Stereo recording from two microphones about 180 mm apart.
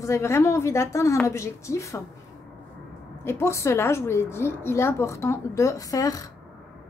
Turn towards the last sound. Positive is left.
turn(degrees=20)  # may be behind; listen again after turning